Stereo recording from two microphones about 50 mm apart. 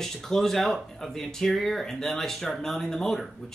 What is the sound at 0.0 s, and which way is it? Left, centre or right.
Speech, centre.